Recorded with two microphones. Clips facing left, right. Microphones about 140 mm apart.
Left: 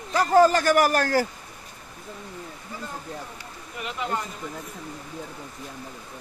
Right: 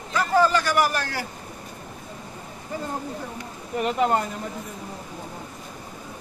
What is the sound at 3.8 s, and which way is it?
Speech, 45° right (ahead or behind).